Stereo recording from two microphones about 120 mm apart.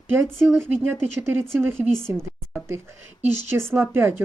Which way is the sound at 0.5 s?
15° right (ahead or behind).